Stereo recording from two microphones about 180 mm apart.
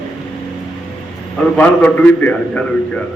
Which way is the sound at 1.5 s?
10° left (ahead or behind).